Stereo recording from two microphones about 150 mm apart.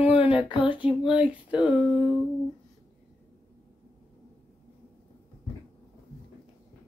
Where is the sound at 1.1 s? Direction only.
10° right (ahead or behind).